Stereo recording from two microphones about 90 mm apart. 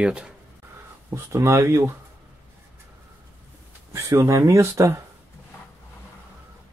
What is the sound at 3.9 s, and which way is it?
Speech, 35° right (ahead or behind).